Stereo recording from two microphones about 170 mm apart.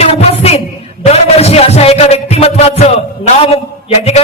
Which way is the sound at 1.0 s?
35° left (ahead or behind).